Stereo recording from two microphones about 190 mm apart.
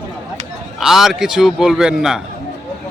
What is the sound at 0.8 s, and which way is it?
A man's voice, centre (ahead or behind).